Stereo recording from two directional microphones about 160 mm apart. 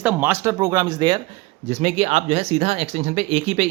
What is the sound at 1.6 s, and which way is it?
A man's voice, 40° right (ahead or behind).